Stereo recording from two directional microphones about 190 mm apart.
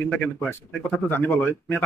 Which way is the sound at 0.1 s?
10° left (ahead or behind).